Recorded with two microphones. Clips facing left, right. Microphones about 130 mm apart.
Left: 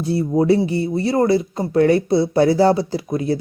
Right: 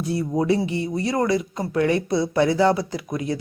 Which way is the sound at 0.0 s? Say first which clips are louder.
Left 5 dB; 30° left (ahead or behind).